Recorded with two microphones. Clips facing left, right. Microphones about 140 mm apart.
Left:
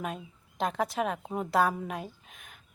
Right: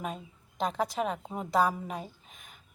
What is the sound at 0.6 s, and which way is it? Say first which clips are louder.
A woman's voice: left 1 dB; centre (ahead or behind).